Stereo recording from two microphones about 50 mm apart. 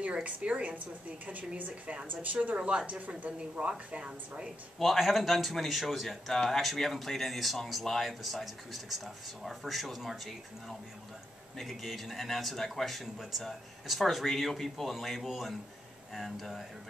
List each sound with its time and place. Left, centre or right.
0.0 s a woman's voice: right
4.7 s speech: centre
11.5 s speech: centre